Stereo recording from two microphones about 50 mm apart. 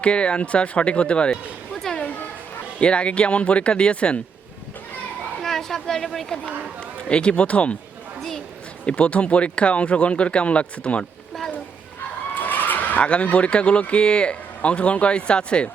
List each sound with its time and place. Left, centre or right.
0.0 s speech: left
2.8 s speech: left
5.4 s a sound: centre
7.1 s speech: left
8.9 s speech: left
12.3 s a sound: left
13.0 s speech: left